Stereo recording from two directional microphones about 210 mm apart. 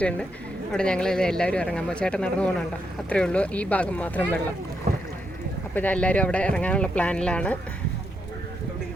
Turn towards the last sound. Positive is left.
turn(degrees=5)  # may be behind; listen again after turning